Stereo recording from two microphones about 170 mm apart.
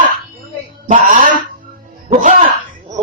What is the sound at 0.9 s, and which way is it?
Speech, 50° right (ahead or behind).